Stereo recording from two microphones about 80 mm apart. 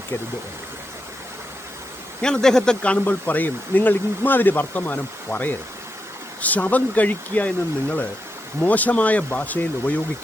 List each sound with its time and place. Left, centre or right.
2.2 s speech: centre